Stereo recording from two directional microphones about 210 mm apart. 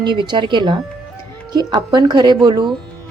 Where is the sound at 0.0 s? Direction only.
20° right (ahead or behind).